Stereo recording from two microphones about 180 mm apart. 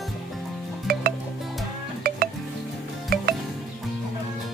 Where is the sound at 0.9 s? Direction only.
55° right (ahead or behind).